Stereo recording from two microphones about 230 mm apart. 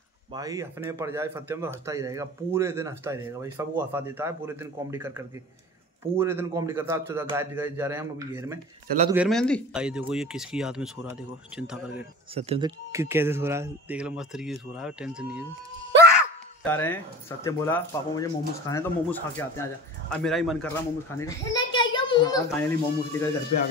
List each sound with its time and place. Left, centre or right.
0.3 s speech: centre
12.4 s speech: right; by 15.4 s centre
16.6 s speech: centre
21.7 s a child's voice: left